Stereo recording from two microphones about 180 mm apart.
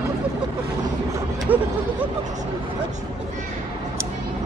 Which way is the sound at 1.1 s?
15° right (ahead or behind).